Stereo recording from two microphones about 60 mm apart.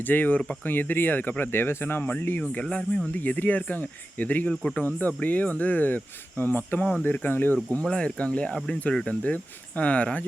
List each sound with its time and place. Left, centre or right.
0.0 s speech: left
4.4 s speech: centre
4.8 s speech: left
7.9 s speech: centre
8.5 s speech: centre
9.0 s speech: left